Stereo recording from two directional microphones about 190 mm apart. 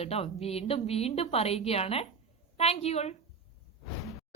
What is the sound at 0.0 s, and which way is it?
A woman's voice, 30° left (ahead or behind).